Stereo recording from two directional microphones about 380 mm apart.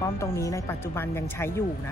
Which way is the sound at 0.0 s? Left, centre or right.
Centre.